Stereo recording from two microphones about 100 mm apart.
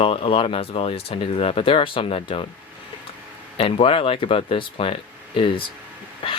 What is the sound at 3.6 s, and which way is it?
Speech, 65° left (ahead or behind).